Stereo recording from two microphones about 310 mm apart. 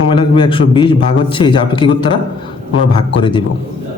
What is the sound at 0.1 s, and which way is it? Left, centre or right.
A man's voice, centre.